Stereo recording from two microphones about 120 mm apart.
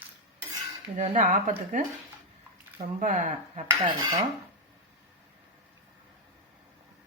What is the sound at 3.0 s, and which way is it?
Speech, 90° right.